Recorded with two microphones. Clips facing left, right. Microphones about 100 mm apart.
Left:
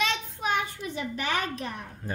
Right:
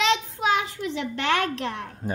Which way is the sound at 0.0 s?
90° right.